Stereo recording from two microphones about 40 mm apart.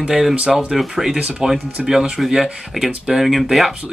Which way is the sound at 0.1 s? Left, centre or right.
Centre.